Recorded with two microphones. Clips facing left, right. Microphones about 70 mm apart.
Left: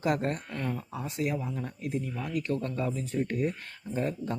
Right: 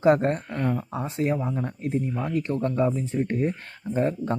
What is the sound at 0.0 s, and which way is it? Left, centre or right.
Speech, right.